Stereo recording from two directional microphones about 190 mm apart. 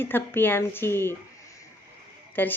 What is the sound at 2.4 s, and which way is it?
Speech, 10° left (ahead or behind).